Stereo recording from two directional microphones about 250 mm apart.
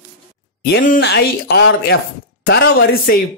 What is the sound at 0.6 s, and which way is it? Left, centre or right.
Speech, left.